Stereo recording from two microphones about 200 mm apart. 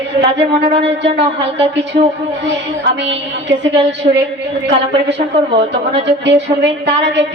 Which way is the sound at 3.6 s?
60° right (ahead or behind).